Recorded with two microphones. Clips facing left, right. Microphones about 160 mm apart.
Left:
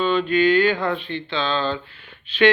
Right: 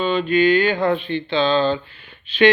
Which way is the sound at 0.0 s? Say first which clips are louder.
Right 1 dB; 10° right (ahead or behind).